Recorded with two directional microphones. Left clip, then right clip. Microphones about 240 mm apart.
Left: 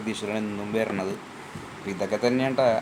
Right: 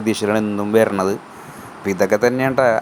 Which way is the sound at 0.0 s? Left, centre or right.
Right.